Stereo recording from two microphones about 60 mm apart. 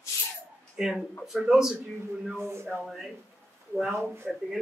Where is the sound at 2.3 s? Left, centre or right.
Right.